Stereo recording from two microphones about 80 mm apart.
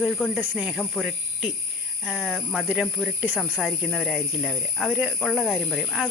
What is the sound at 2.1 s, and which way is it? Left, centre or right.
Speech, centre.